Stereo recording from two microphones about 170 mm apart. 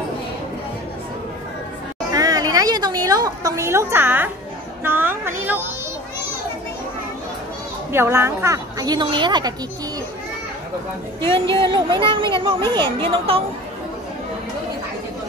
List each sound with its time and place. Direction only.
2.1 s a woman's voice: 20° right (ahead or behind)
7.9 s a woman's voice: 15° right (ahead or behind)
11.1 s a woman's voice: 30° right (ahead or behind)